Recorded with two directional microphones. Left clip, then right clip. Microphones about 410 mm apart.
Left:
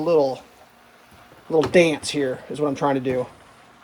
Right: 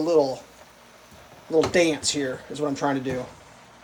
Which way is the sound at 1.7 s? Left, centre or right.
Centre.